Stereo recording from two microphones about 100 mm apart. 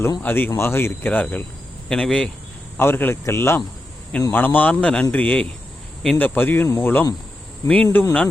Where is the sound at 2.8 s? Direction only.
20° left (ahead or behind).